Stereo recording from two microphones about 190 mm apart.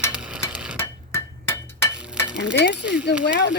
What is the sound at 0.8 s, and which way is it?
Hammer, 15° left (ahead or behind).